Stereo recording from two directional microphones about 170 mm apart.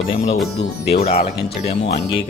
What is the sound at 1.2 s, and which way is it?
Speech, 35° left (ahead or behind).